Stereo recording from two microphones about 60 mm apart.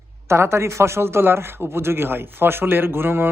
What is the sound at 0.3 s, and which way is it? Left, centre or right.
A man's voice, right.